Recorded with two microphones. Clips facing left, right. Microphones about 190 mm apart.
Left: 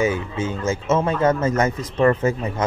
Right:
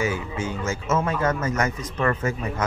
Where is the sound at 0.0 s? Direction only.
20° left (ahead or behind).